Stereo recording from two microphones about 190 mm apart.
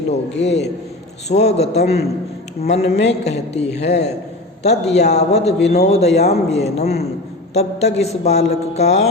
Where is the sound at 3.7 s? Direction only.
65° left (ahead or behind).